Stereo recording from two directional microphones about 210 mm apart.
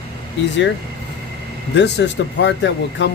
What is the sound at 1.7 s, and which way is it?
Speech, 55° left (ahead or behind).